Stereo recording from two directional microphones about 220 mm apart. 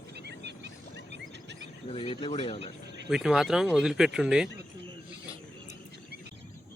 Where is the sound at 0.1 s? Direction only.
50° right (ahead or behind).